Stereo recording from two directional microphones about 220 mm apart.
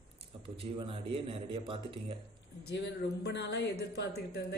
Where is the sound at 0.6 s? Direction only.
25° right (ahead or behind).